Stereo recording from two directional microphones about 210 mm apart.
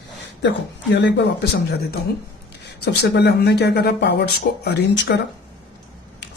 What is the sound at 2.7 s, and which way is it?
Speech, 55° left (ahead or behind).